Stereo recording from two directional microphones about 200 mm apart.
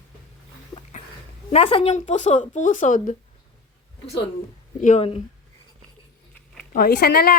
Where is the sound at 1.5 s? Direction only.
25° left (ahead or behind).